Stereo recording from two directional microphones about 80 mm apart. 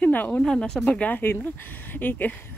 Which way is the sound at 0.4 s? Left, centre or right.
Centre.